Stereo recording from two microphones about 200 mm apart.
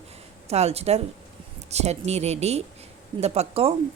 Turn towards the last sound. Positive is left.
turn(degrees=-30)  # may be behind; listen again after turning